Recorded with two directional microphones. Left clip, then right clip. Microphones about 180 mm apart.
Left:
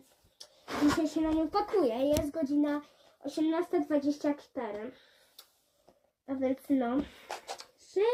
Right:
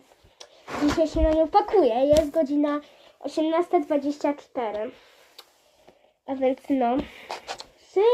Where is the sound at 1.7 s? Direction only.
20° left (ahead or behind).